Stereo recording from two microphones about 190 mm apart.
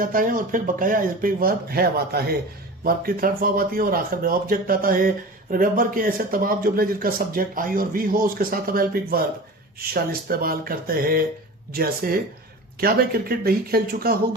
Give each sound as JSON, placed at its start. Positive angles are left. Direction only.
{"t": 0.0, "sound": "speech", "side_deg": -45}